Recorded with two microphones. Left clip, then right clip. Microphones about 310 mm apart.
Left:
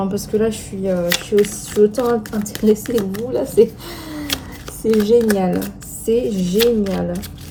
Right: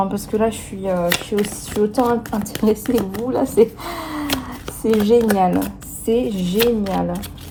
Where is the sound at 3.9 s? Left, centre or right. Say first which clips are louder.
Right 4 dB; centre.